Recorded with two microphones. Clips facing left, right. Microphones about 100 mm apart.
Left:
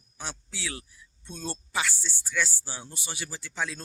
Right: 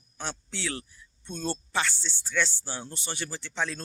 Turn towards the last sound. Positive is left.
turn(degrees=5)  # may be behind; listen again after turning